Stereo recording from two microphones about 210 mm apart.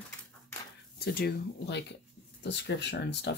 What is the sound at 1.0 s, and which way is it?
Speech, 50° left (ahead or behind).